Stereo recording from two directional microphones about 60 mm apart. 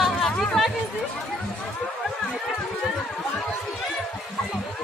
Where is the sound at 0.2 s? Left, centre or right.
Centre.